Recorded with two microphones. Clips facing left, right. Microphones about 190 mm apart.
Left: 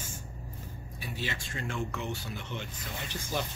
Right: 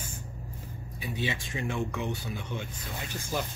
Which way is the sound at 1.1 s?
15° right (ahead or behind).